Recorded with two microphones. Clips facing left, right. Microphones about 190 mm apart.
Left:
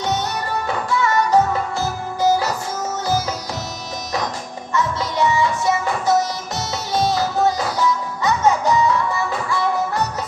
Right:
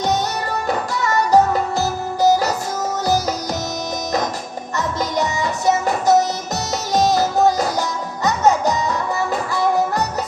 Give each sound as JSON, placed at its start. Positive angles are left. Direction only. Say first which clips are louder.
{"t": 0.7, "sound": "music", "louder": "left 1 dB", "side_deg": -40}
{"t": 4.7, "sound": "music", "louder": "even", "side_deg": -40}